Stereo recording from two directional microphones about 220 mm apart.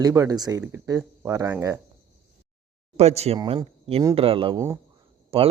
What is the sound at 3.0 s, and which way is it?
A man's voice, 30° right (ahead or behind).